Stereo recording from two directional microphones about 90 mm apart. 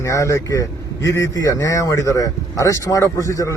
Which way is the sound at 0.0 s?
35° left (ahead or behind).